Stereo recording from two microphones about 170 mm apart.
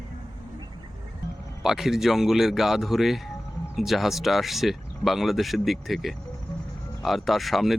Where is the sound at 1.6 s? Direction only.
Centre (ahead or behind).